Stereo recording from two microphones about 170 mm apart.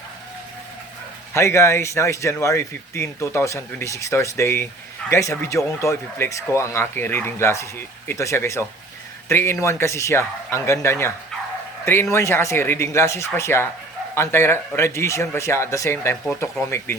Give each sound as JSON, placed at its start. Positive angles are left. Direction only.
{"t": 1.3, "sound": "speech", "side_deg": 15}
{"t": 12.1, "sound": "speech", "side_deg": 15}